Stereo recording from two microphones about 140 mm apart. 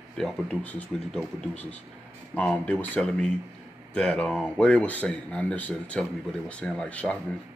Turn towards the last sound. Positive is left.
turn(degrees=10)  # may be behind; listen again after turning